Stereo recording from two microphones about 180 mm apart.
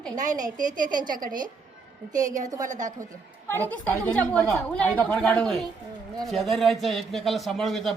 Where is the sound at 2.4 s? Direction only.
20° right (ahead or behind).